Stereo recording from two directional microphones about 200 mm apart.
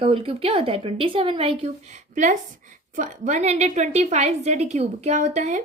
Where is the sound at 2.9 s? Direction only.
40° right (ahead or behind).